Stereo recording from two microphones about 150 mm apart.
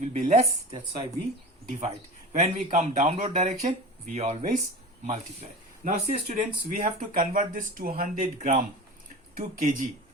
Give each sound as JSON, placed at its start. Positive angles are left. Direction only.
{"t": 0.0, "sound": "a sound", "side_deg": -50}
{"t": 2.3, "sound": "speech", "side_deg": -55}
{"t": 3.1, "sound": "speech", "side_deg": -45}
{"t": 5.9, "sound": "speech", "side_deg": -70}